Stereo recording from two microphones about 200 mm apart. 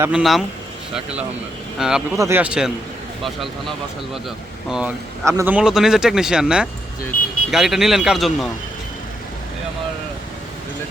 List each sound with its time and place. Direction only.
0.0 s speech: 5° right (ahead or behind)
1.8 s speech: 5° right (ahead or behind)
5.2 s speech: 10° right (ahead or behind)
7.1 s speech: 45° left (ahead or behind)
7.5 s speech: centre (ahead or behind)